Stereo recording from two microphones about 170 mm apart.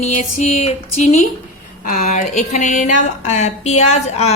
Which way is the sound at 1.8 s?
45° left (ahead or behind).